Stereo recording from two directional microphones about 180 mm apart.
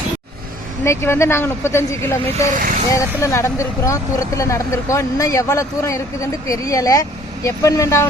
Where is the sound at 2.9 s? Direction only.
15° left (ahead or behind).